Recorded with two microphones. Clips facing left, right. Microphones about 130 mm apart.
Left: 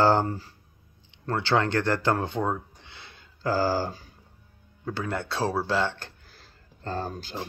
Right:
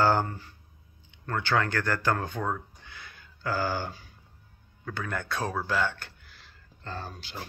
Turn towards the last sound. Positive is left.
turn(degrees=40)  # may be behind; listen again after turning